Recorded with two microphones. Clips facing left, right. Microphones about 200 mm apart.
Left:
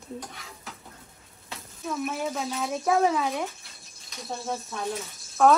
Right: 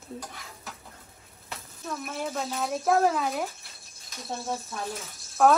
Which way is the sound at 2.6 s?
Centre (ahead or behind).